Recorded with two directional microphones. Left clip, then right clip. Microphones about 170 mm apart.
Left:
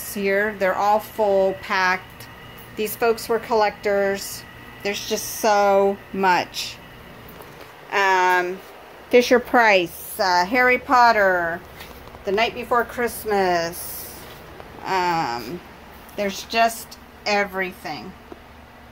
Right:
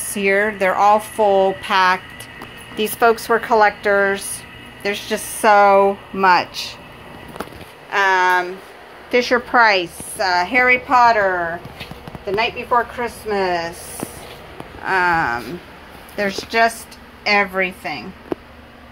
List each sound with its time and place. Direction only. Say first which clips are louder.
0.1 s speech: right 4 dB; 5° right (ahead or behind); by 6.7 s 25° left (ahead or behind)
7.9 s a sound: right 3 dB; 35° left (ahead or behind)
9.1 s a woman's voice: even; 55° left (ahead or behind); by 14.1 s 40° left (ahead or behind)
14.9 s speech: right 5 dB; 20° left (ahead or behind)
16.2 s a woman's voice: right 3 dB; 5° right (ahead or behind)